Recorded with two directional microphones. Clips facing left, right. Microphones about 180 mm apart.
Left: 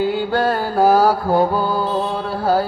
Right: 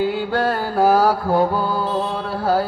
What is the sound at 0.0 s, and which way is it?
Mantra, 35° left (ahead or behind).